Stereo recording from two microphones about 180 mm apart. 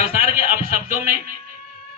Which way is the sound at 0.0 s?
55° right (ahead or behind).